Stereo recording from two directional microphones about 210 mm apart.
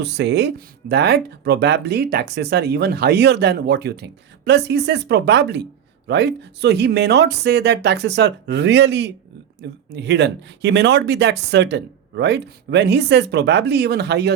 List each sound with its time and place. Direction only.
0.0 s speech: 55° right (ahead or behind)